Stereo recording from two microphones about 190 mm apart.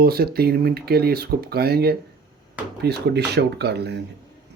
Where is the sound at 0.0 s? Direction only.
55° right (ahead or behind).